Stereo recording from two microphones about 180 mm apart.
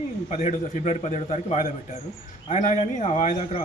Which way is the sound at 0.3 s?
35° left (ahead or behind).